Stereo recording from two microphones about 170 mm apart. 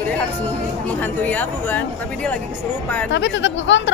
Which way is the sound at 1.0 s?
10° left (ahead or behind).